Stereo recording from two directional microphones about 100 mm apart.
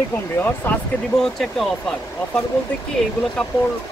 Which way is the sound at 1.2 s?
Centre (ahead or behind).